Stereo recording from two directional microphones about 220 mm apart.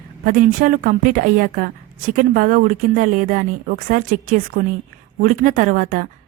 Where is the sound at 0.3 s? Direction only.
40° right (ahead or behind).